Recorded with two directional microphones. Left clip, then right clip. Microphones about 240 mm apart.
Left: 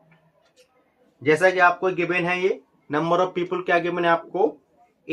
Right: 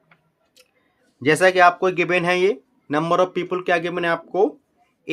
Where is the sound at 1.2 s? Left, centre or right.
Right.